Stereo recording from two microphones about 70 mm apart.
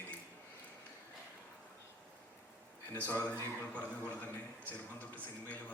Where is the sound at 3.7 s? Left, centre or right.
Left.